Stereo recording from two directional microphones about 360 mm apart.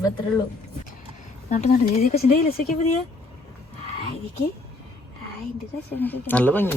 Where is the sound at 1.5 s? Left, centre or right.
Centre.